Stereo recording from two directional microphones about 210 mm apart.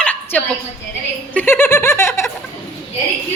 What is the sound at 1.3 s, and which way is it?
Snicker, 10° left (ahead or behind).